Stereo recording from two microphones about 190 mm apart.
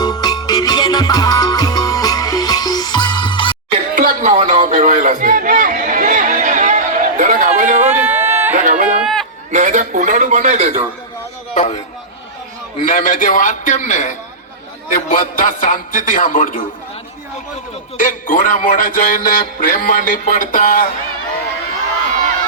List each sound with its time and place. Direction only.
0.0 s music: 20° left (ahead or behind)
3.9 s a sound: 45° right (ahead or behind)
7.9 s a sound: 10° right (ahead or behind)
8.5 s a sound: 45° right (ahead or behind)
9.0 s chatter: centre (ahead or behind)
9.5 s a man's voice: 40° right (ahead or behind)
11.5 s a man's voice: 35° left (ahead or behind)
12.8 s a man's voice: 40° left (ahead or behind)
17.9 s a man's voice: 45° left (ahead or behind)